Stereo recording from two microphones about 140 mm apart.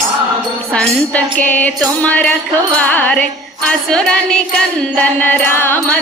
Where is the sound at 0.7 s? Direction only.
5° left (ahead or behind).